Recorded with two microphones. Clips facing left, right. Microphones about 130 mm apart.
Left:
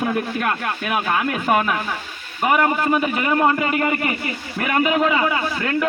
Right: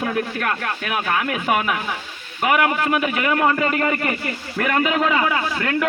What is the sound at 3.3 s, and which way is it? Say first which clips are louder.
A man's voice: left 1 dB; 15° left (ahead or behind).